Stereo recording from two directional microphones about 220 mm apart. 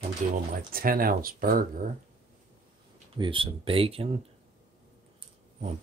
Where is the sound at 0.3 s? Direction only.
40° right (ahead or behind).